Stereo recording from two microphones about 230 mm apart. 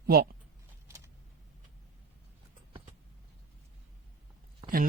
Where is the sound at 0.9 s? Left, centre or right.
Centre.